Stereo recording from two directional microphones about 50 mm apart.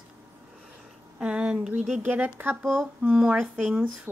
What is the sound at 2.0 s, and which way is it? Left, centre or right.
Speech, right.